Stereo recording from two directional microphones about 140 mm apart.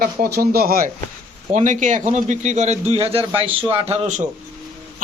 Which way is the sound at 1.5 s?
65° right (ahead or behind).